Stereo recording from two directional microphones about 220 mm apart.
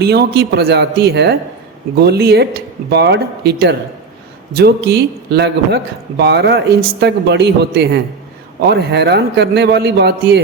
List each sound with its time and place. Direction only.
0.0 s a man's voice: 45° right (ahead or behind)